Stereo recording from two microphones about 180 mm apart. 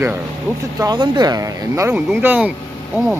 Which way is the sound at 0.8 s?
25° right (ahead or behind).